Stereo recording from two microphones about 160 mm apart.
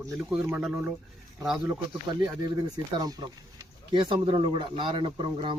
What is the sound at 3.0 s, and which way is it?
Speech, 25° right (ahead or behind).